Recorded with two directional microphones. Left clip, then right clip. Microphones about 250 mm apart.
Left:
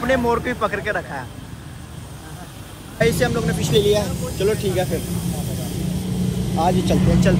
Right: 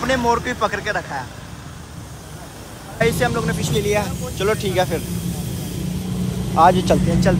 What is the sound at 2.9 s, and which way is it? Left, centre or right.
Speech, centre.